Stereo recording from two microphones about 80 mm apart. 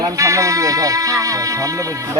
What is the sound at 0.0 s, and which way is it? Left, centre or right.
Speech, right.